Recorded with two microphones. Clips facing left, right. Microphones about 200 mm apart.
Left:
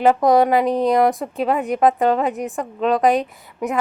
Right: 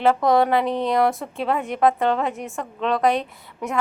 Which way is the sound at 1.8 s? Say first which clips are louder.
Left 2 dB; 20° left (ahead or behind).